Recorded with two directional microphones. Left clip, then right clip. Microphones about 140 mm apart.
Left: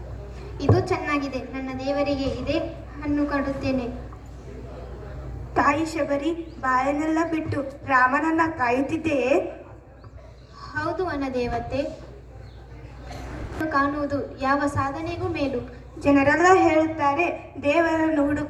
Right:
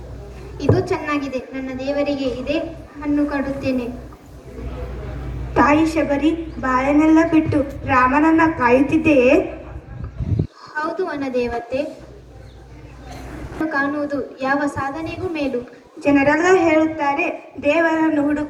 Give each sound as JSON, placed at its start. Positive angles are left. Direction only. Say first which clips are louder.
{"t": 0.6, "sound": "a woman's voice", "louder": "right 4 dB", "side_deg": 40}
{"t": 5.5, "sound": "a woman's voice", "louder": "right 6 dB", "side_deg": 40}
{"t": 6.6, "sound": "a woman's voice", "louder": "right 1 dB", "side_deg": 20}
{"t": 7.1, "sound": "a woman's voice", "louder": "right 10 dB", "side_deg": 40}
{"t": 10.8, "sound": "a woman's voice", "louder": "right 4 dB", "side_deg": 40}
{"t": 13.7, "sound": "a woman's voice", "louder": "right 2 dB", "side_deg": 40}